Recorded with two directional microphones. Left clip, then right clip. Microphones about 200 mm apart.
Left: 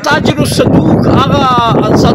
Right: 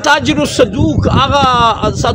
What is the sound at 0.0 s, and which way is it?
Speech, 25° right (ahead or behind).